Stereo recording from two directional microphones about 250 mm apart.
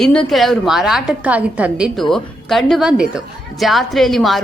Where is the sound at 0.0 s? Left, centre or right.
Centre.